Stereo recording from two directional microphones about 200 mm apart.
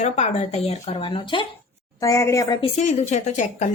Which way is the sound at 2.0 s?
15° left (ahead or behind).